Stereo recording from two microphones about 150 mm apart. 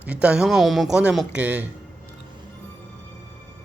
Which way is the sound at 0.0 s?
10° right (ahead or behind).